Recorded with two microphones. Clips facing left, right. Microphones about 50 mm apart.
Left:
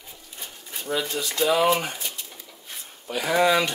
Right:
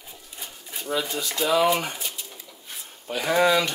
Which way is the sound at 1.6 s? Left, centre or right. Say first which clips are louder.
Even; centre.